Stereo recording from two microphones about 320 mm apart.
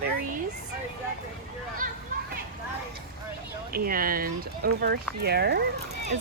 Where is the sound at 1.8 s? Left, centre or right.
Right.